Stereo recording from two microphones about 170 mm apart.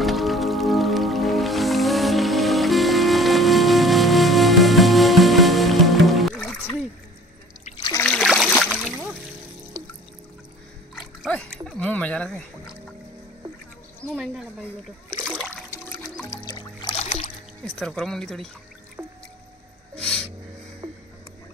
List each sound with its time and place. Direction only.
0.0 s music: centre (ahead or behind)
7.7 s trickle: 25° left (ahead or behind)
8.0 s a sound: 5° left (ahead or behind)
11.2 s a sound: 5° left (ahead or behind)
14.1 s a sound: centre (ahead or behind)
15.2 s water: centre (ahead or behind)
16.4 s music: 30° left (ahead or behind)
17.6 s speech: centre (ahead or behind)
19.0 s music: 10° right (ahead or behind)
20.0 s music: 5° left (ahead or behind)